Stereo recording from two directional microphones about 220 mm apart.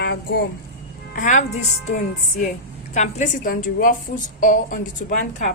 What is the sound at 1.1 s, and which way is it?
Speech, 35° left (ahead or behind).